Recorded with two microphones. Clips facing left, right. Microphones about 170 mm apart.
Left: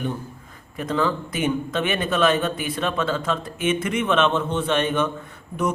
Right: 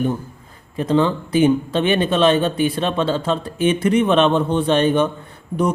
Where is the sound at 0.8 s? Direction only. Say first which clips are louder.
Right 6 dB; 30° right (ahead or behind).